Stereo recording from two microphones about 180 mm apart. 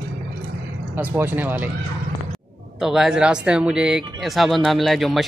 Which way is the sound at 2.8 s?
Centre (ahead or behind).